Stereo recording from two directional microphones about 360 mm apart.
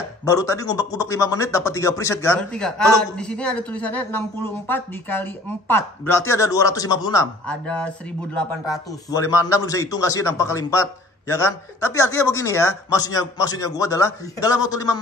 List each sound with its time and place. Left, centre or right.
0.2 s speech: centre
9.1 s speech: centre
11.9 s speech: centre